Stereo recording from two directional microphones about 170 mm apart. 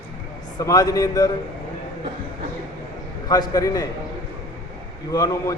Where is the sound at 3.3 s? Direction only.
20° left (ahead or behind).